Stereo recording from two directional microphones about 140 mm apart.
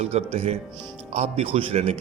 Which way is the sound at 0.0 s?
50° right (ahead or behind).